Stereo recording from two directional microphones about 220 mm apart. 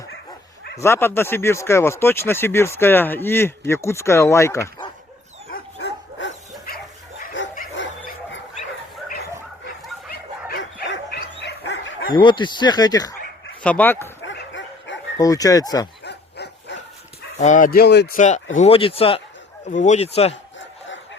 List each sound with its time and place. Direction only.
0.8 s speech: 10° left (ahead or behind)
5.5 s dog: 45° left (ahead or behind)
6.7 s bow-wow: 45° left (ahead or behind)
7.4 s bow-wow: 55° left (ahead or behind)
7.8 s dog: 55° left (ahead or behind)
10.1 s dog: 45° left (ahead or behind)
11.3 s bow-wow: 55° left (ahead or behind)
12.1 s speech: 20° left (ahead or behind)
13.6 s speech: 5° left (ahead or behind)
14.3 s bow-wow: 55° left (ahead or behind)
15.2 s speech: 15° left (ahead or behind)
16.0 s bow-wow: 50° left (ahead or behind)
17.4 s speech: 35° left (ahead or behind)
18.2 s speech: 35° left (ahead or behind)